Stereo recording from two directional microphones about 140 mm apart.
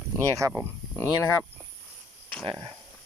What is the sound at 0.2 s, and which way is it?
Speech, 20° right (ahead or behind).